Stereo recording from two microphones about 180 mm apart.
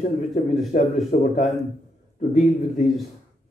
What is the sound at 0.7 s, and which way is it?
A man's voice, 45° left (ahead or behind).